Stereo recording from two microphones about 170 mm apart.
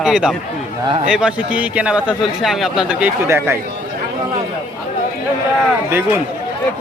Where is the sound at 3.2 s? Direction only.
15° right (ahead or behind).